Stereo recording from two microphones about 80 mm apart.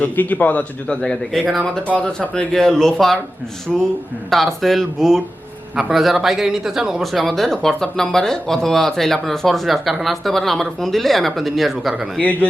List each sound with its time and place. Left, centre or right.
0.0 s speech: left
2.0 s speech: centre
12.2 s speech: centre